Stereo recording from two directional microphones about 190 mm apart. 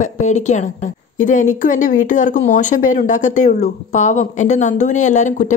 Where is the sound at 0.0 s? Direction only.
40° left (ahead or behind).